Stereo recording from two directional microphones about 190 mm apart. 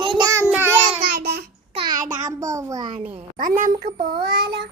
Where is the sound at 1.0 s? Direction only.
55° right (ahead or behind).